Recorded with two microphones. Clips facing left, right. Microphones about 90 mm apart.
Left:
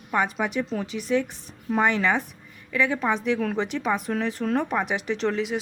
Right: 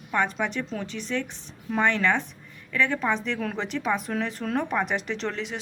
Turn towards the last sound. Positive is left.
turn(degrees=5)  # may be behind; listen again after turning